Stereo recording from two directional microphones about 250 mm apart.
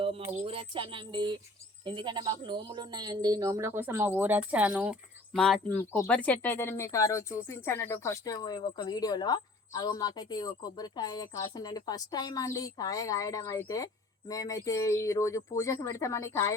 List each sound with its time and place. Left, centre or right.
0.4 s speech: right; by 16.6 s centre